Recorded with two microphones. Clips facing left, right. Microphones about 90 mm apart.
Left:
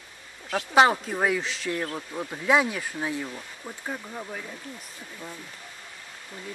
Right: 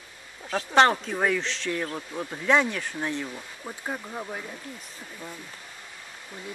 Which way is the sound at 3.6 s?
10° right (ahead or behind).